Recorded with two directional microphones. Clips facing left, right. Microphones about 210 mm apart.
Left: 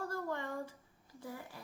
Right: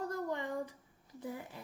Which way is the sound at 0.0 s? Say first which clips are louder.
Right 2 dB; 20° right (ahead or behind).